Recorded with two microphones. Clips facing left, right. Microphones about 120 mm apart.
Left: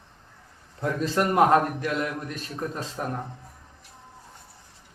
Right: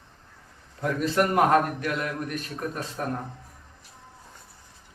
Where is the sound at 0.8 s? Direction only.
25° left (ahead or behind).